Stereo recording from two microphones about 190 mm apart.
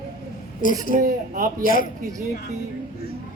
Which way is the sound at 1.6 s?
50° left (ahead or behind).